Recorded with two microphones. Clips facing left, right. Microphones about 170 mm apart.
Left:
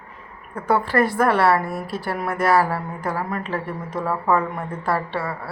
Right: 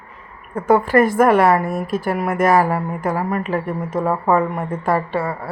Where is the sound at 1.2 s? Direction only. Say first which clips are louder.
Right 4 dB; 10° right (ahead or behind).